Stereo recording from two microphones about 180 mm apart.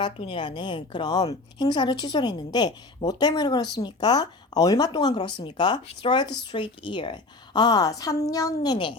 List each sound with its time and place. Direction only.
0.0 s a woman's voice: 30° left (ahead or behind)